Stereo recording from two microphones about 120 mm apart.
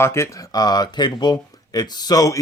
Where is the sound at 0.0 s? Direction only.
20° left (ahead or behind).